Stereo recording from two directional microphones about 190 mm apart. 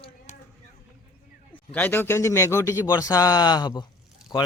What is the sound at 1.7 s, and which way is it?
Speech, 10° left (ahead or behind).